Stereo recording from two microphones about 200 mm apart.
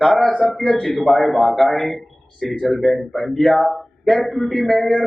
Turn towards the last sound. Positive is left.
turn(degrees=0)  # may be behind; listen again after turning